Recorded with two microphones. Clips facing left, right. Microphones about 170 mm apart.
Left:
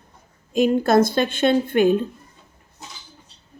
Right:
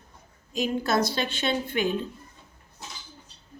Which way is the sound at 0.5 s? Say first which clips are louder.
Left 9 dB; 55° left (ahead or behind).